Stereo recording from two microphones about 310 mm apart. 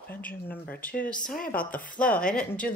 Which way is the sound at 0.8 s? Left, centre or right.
Centre.